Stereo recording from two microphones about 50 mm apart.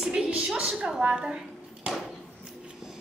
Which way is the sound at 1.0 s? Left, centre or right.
Centre.